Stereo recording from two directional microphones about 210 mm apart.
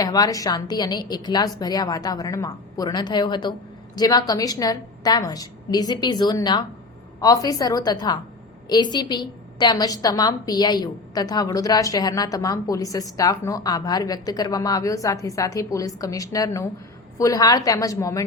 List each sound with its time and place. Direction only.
0.0 s a woman's voice: 20° left (ahead or behind)